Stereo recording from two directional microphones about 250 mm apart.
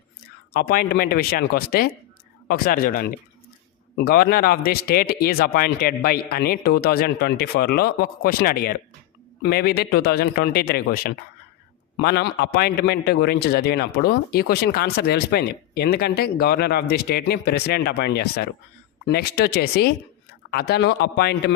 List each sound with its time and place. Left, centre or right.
0.5 s a man's voice: left